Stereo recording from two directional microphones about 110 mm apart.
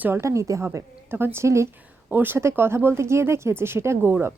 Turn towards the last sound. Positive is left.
turn(degrees=-25)  # may be behind; listen again after turning